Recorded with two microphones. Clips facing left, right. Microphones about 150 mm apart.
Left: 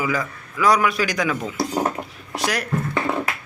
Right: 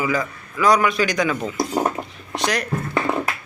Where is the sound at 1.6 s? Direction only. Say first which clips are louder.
Right 1 dB; 15° right (ahead or behind).